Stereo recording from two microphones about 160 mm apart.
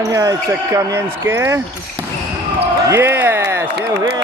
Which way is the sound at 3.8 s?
90° right.